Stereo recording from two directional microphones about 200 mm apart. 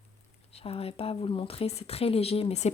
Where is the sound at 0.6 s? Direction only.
25° left (ahead or behind).